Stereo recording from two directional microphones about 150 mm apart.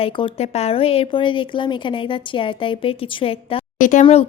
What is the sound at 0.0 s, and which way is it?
Speech, 40° left (ahead or behind).